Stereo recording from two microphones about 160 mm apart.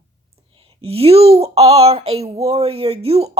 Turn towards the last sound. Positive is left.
turn(degrees=-40)  # may be behind; listen again after turning